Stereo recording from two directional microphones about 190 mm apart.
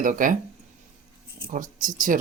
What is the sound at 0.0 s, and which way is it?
Speech, 45° right (ahead or behind).